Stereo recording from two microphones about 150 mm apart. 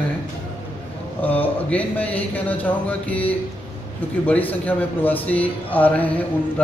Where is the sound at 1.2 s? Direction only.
10° left (ahead or behind).